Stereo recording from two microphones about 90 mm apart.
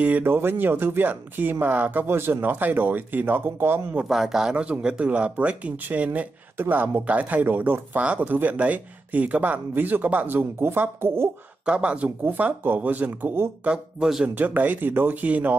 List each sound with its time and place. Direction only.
0.0 s speech: 20° right (ahead or behind)
4.0 s speech: 5° right (ahead or behind); by 11.2 s 25° right (ahead or behind)
11.6 s speech: 10° right (ahead or behind)
13.7 s speech: 10° right (ahead or behind)
14.3 s speech: 20° right (ahead or behind)